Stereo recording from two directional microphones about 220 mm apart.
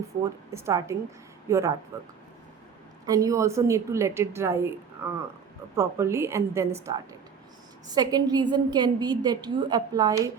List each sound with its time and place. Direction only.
0.5 s a woman's voice: 10° right (ahead or behind)
3.1 s a woman's voice: 15° right (ahead or behind)